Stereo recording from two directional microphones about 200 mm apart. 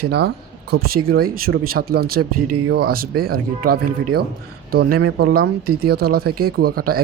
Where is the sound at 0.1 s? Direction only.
55° right (ahead or behind).